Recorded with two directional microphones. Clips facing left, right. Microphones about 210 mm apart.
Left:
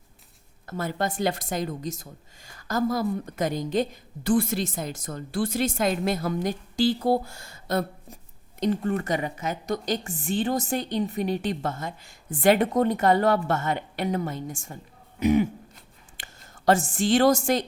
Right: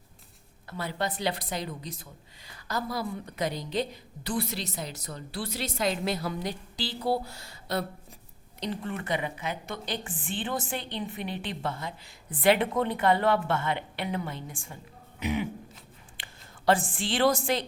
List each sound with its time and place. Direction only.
0.7 s a woman's voice: 45° left (ahead or behind)